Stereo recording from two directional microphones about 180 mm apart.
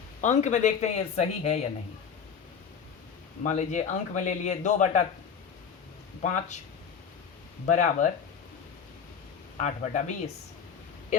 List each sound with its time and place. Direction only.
0.2 s speech: 40° left (ahead or behind)
3.4 s speech: 40° left (ahead or behind)
7.7 s speech: 40° left (ahead or behind)
9.6 s speech: 40° left (ahead or behind)